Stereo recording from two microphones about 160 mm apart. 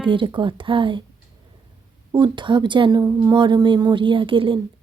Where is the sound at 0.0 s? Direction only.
30° right (ahead or behind).